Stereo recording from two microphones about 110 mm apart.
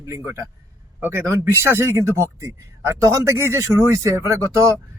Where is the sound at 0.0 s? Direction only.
30° right (ahead or behind).